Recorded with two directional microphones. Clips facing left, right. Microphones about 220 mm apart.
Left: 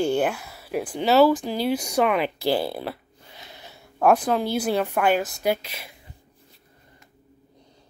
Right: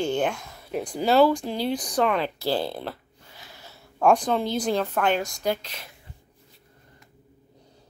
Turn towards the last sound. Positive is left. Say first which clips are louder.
# left 3 dB
turn(degrees=10)  # may be behind; listen again after turning